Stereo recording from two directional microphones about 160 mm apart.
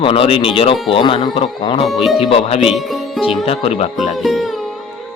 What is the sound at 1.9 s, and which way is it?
Speech, centre (ahead or behind).